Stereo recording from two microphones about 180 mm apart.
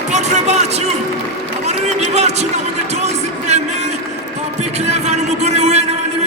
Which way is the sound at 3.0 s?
40° right (ahead or behind).